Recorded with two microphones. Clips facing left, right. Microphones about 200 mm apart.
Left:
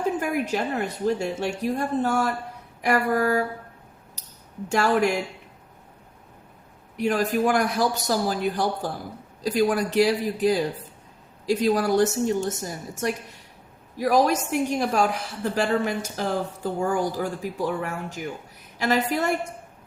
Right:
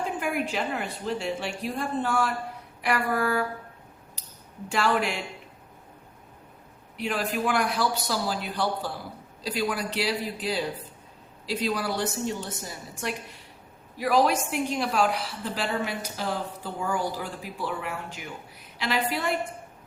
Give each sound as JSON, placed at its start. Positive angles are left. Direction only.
{"t": 0.2, "sound": "a woman's voice", "side_deg": 40}
{"t": 4.7, "sound": "a woman's voice", "side_deg": 45}
{"t": 6.9, "sound": "a woman's voice", "side_deg": 45}